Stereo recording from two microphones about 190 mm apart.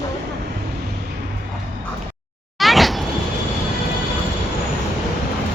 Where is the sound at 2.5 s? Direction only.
Centre (ahead or behind).